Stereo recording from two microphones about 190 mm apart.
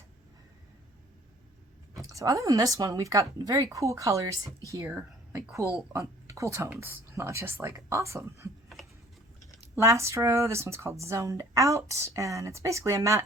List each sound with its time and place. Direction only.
2.0 s a woman's voice: 20° right (ahead or behind)
9.7 s a woman's voice: 15° right (ahead or behind)